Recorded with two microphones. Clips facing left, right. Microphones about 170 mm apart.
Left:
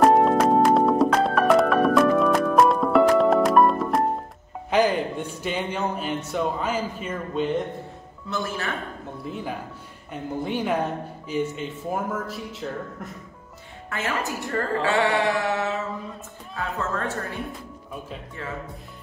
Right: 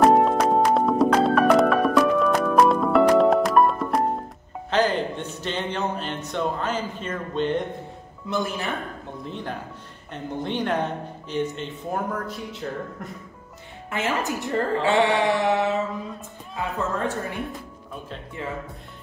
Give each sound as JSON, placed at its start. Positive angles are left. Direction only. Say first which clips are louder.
{"t": 0.0, "sound": "music", "louder": "even", "side_deg": 0}
{"t": 4.6, "sound": "speech", "louder": "left 1 dB", "side_deg": 10}
{"t": 8.3, "sound": "speech", "louder": "right 2 dB", "side_deg": -15}
{"t": 9.2, "sound": "speech", "louder": "left 1 dB", "side_deg": 5}
{"t": 13.8, "sound": "a woman's voice", "louder": "right 2 dB", "side_deg": -20}